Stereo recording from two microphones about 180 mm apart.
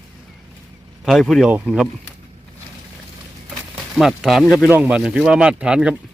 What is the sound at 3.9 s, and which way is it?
Speech, centre (ahead or behind).